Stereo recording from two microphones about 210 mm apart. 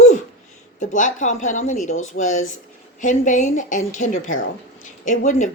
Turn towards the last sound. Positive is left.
turn(degrees=35)  # may be behind; listen again after turning